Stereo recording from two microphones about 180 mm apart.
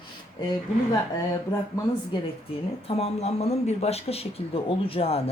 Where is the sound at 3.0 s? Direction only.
35° left (ahead or behind).